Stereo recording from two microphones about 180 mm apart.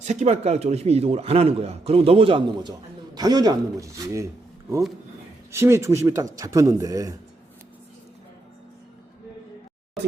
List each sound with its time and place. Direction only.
0.0 s a man's voice: 40° right (ahead or behind); by 4.3 s 15° right (ahead or behind)
5.5 s speech: 15° right (ahead or behind)